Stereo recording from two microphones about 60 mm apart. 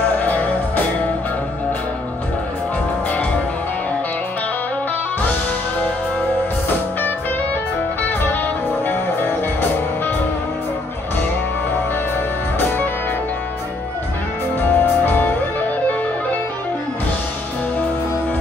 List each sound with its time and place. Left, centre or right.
0.1 s music: left
8.8 s music: left
12.5 s music: left
14.6 s music: left